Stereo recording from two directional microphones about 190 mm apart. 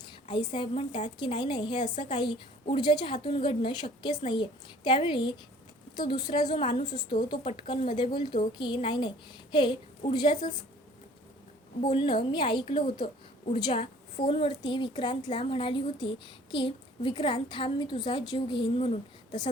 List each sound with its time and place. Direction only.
0.3 s a woman's voice: 25° left (ahead or behind)
11.9 s a woman's voice: 25° left (ahead or behind)